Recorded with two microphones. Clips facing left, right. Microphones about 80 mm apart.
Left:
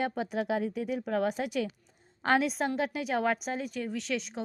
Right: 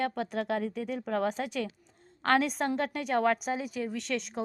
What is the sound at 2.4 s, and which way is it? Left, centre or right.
A woman's voice, centre.